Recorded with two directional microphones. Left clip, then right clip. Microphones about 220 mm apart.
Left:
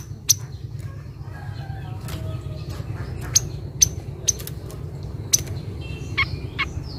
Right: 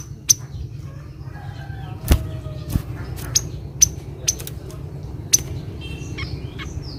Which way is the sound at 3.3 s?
10° left (ahead or behind).